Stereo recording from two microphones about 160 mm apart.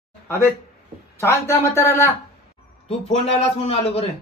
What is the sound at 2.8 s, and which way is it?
A man's voice, 40° left (ahead or behind).